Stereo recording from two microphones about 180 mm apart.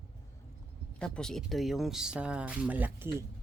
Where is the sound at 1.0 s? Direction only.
5° left (ahead or behind).